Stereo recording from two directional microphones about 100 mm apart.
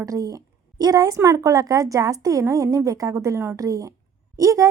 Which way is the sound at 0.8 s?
40° right (ahead or behind).